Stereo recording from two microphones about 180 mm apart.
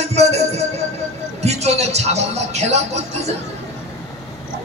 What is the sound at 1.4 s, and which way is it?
Speech, 35° right (ahead or behind).